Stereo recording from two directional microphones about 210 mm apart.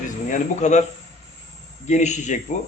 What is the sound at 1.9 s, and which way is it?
Speech, 35° left (ahead or behind).